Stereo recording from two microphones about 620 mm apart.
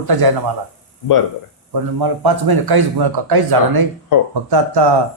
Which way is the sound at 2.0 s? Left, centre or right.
Right.